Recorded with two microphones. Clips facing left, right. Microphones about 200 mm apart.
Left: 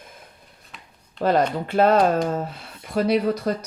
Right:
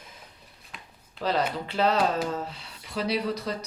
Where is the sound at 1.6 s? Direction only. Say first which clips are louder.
Left 7 dB; 50° left (ahead or behind).